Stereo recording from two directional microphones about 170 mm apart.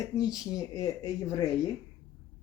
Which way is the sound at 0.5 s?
20° left (ahead or behind).